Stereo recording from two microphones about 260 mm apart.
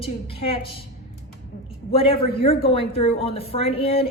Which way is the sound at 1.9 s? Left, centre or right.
Left.